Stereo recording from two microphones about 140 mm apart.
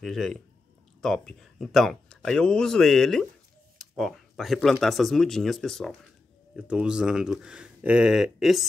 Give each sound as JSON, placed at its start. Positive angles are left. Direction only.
{"t": 0.0, "sound": "speech", "side_deg": 0}